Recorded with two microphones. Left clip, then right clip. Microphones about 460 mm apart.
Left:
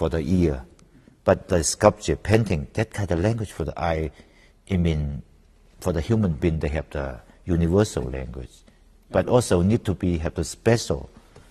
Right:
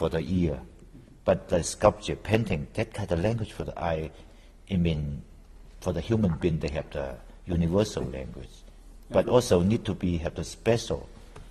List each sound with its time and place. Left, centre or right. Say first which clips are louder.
0.0 s a man's voice: left 5 dB; left
5.8 s a man's voice: left 4 dB; left